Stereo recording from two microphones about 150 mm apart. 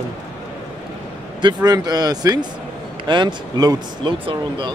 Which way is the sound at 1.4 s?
25° right (ahead or behind).